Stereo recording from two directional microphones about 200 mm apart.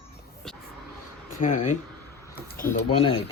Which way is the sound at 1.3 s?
40° left (ahead or behind).